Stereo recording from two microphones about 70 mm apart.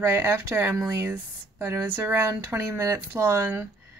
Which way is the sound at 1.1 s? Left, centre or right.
Right.